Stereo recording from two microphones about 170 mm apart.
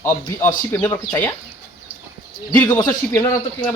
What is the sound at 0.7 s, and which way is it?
Speech, 15° left (ahead or behind).